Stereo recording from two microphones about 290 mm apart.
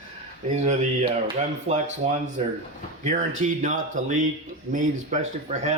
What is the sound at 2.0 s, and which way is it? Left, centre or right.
Speech, right.